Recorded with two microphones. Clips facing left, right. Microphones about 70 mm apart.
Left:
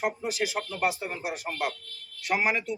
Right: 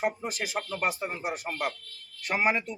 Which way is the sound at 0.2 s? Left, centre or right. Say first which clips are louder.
Left 3 dB; right.